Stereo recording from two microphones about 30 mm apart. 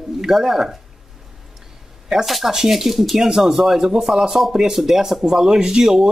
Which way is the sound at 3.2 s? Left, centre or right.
Centre.